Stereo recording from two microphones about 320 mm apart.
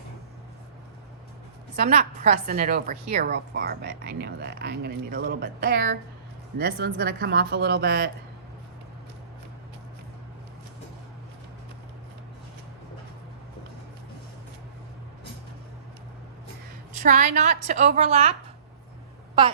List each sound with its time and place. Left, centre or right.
1.7 s a woman's voice: right
17.0 s a woman's voice: right